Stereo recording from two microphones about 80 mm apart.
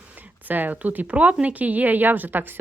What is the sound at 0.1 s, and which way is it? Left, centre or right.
A woman's voice, centre.